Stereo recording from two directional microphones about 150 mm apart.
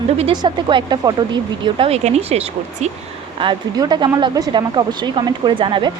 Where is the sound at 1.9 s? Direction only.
45° right (ahead or behind).